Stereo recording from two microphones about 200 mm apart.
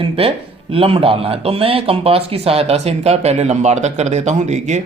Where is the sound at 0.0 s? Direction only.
30° right (ahead or behind).